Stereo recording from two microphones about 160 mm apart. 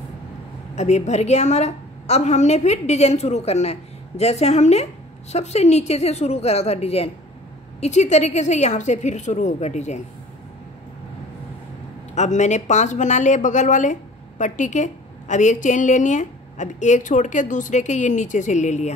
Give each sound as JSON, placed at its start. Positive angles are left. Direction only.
{"t": 0.7, "sound": "a woman's voice", "side_deg": 45}
{"t": 12.2, "sound": "a woman's voice", "side_deg": 45}